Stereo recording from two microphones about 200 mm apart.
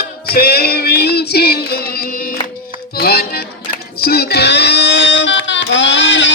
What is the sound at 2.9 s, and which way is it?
Music, 50° left (ahead or behind).